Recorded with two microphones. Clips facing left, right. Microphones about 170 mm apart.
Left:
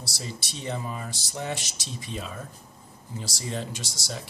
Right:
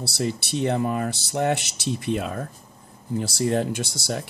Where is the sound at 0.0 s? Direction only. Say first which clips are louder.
Right 11 dB; 65° right (ahead or behind).